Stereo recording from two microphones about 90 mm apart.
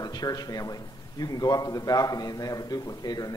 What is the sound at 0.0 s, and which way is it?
A man's voice, 45° left (ahead or behind).